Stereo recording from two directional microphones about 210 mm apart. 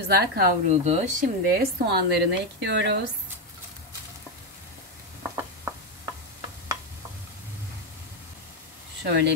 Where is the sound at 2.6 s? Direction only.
55° right (ahead or behind).